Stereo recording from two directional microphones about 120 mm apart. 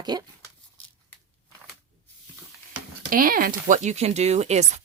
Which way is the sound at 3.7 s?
70° right (ahead or behind).